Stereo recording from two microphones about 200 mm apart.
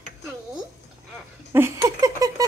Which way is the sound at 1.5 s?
15° right (ahead or behind).